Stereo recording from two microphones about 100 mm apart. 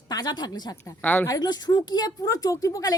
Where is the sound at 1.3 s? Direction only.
40° left (ahead or behind).